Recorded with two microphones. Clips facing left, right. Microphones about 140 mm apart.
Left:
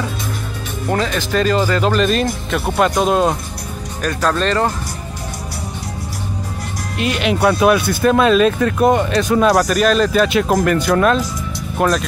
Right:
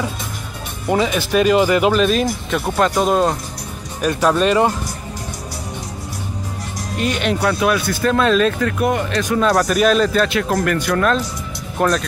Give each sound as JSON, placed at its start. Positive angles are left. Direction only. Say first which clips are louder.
{"t": 0.8, "sound": "speech", "louder": "right 2 dB", "side_deg": -10}
{"t": 4.0, "sound": "speech", "louder": "right 2 dB", "side_deg": -10}
{"t": 7.0, "sound": "speech", "louder": "left 1 dB", "side_deg": 5}
{"t": 7.3, "sound": "speech", "louder": "left 8 dB", "side_deg": 25}
{"t": 8.1, "sound": "speech", "louder": "left 3 dB", "side_deg": 15}
{"t": 8.7, "sound": "speech", "louder": "left 5 dB", "side_deg": 30}
{"t": 9.4, "sound": "speech", "louder": "left 2 dB", "side_deg": 15}
{"t": 9.7, "sound": "speech", "louder": "even", "side_deg": -5}
{"t": 10.1, "sound": "speech", "louder": "left 3 dB", "side_deg": 15}
{"t": 11.8, "sound": "speech", "louder": "left 1 dB", "side_deg": 5}